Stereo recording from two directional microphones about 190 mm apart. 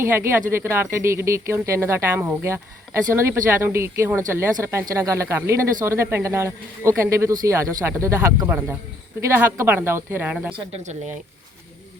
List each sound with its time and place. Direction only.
0.0 s speech: 10° right (ahead or behind)
10.5 s speech: 30° right (ahead or behind)